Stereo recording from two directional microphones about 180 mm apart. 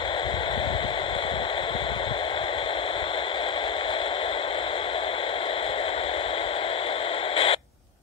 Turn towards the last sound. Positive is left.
turn(degrees=30)  # may be behind; listen again after turning